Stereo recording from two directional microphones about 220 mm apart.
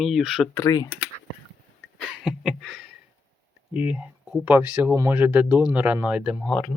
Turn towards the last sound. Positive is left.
turn(degrees=0)  # may be behind; listen again after turning